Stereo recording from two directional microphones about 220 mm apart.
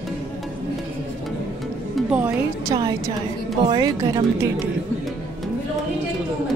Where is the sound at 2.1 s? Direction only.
10° right (ahead or behind).